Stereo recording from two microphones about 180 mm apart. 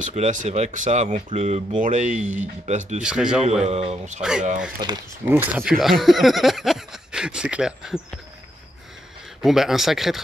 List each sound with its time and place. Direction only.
0.0 s speech: 45° right (ahead or behind)
3.0 s speech: 5° right (ahead or behind)
3.6 s speech: 35° right (ahead or behind)
4.8 s speech: 25° right (ahead or behind)
5.3 s speech: 10° right (ahead or behind)
9.4 s speech: centre (ahead or behind)